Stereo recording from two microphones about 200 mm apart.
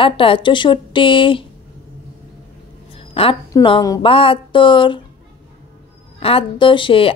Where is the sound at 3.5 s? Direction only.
20° left (ahead or behind).